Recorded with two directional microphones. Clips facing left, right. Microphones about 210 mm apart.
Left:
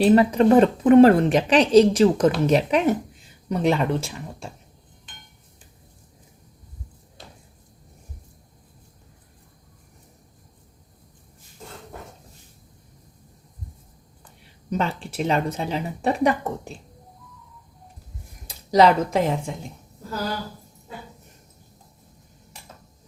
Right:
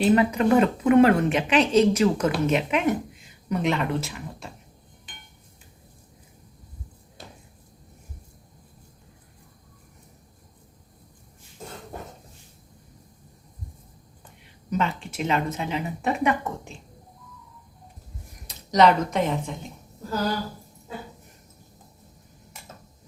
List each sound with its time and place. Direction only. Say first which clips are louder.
0.0 s a woman's voice: left 4 dB; 35° left (ahead or behind)
14.7 s a woman's voice: left 1 dB; 35° left (ahead or behind)
18.7 s speech: left 2 dB; 30° left (ahead or behind)